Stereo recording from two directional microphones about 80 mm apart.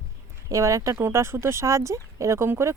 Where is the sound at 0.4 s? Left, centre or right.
Right.